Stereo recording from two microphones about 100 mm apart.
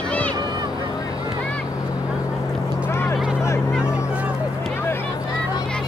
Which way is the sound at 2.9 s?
25° left (ahead or behind).